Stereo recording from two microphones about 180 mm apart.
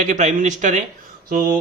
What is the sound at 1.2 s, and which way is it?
Speech, 55° right (ahead or behind).